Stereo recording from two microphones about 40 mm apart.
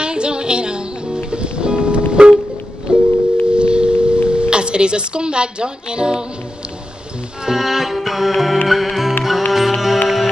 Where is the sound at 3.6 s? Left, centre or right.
Right.